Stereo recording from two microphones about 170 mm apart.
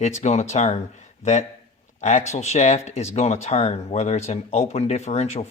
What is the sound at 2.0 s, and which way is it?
Speech, 45° left (ahead or behind).